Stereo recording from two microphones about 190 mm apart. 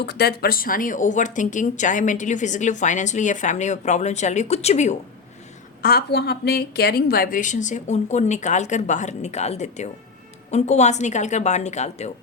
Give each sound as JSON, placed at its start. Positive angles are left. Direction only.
{"t": 0.0, "sound": "speech", "side_deg": 60}
{"t": 5.8, "sound": "speech", "side_deg": 55}